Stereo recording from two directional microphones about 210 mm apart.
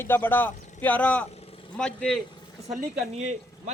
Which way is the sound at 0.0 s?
10° left (ahead or behind).